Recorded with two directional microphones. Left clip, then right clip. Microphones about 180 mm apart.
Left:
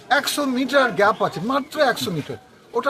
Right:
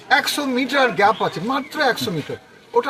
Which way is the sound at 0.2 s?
30° left (ahead or behind).